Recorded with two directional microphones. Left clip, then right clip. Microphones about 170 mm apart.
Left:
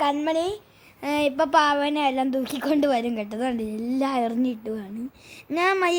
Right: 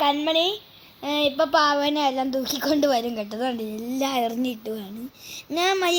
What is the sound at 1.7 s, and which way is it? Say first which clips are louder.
A woman's voice: right 1 dB; 5° left (ahead or behind).